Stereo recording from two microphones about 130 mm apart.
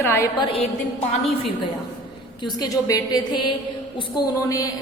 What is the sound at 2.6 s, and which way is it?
A woman's voice, 25° left (ahead or behind).